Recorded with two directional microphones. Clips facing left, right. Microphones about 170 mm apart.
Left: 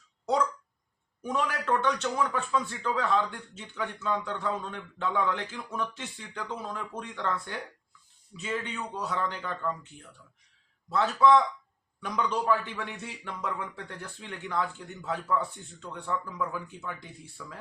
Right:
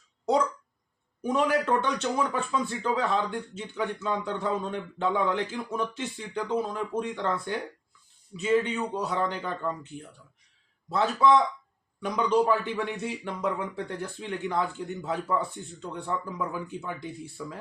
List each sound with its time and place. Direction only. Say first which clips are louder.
1.2 s a man's voice: right 6 dB; 20° right (ahead or behind)
10.8 s a man's voice: even; 20° right (ahead or behind)